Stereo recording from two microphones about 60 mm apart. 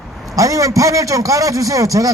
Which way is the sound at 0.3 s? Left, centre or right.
Right.